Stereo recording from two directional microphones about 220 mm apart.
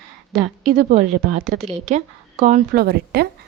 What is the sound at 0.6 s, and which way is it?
Speech, 45° right (ahead or behind).